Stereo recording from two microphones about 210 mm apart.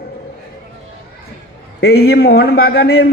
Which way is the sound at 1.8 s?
50° left (ahead or behind).